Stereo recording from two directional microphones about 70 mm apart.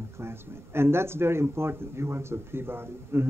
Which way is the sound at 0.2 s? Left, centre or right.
Right.